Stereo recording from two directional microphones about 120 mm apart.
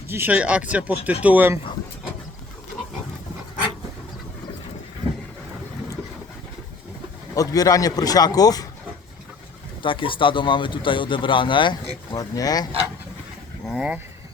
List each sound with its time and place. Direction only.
0.1 s speech: 15° right (ahead or behind)
7.3 s a man's voice: 30° left (ahead or behind)
9.8 s speech: 45° left (ahead or behind)
12.1 s a man's voice: 30° left (ahead or behind)
13.7 s speech: 5° right (ahead or behind)